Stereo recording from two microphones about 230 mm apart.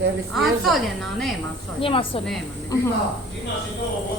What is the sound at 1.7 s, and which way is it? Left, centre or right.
Speech, left.